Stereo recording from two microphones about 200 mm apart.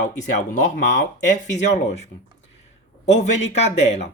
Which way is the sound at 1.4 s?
35° left (ahead or behind).